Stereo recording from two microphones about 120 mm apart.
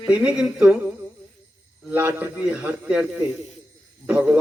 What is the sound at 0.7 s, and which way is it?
Humming, 20° right (ahead or behind).